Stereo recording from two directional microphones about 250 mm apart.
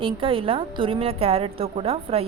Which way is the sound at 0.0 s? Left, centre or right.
Right.